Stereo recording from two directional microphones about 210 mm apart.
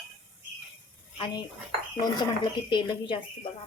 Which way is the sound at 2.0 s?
20° left (ahead or behind).